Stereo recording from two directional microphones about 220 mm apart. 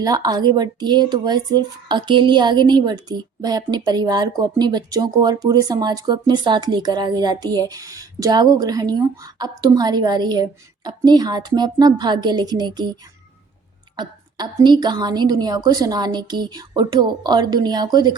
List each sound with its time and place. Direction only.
0.0 s speech: 15° right (ahead or behind)